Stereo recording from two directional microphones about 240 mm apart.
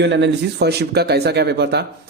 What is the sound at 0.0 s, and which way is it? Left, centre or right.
Speech, right.